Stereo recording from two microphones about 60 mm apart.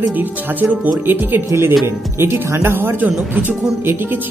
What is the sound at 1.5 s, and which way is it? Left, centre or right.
Speech, right.